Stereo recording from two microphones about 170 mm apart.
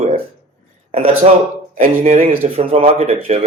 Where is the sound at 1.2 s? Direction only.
40° right (ahead or behind).